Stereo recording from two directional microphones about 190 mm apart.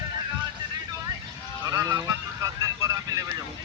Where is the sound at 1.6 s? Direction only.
15° right (ahead or behind).